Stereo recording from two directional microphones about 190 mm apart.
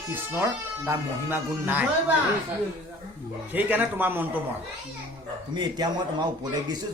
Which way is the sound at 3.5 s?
10° right (ahead or behind).